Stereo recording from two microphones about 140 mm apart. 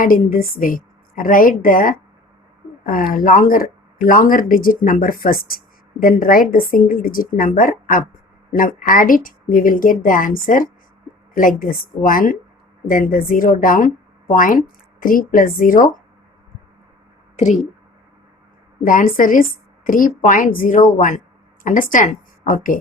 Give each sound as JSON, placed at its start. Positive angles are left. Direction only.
{"t": 0.0, "sound": "a woman's voice", "side_deg": 90}
{"t": 17.3, "sound": "speech", "side_deg": 60}
{"t": 18.8, "sound": "a woman's voice", "side_deg": 75}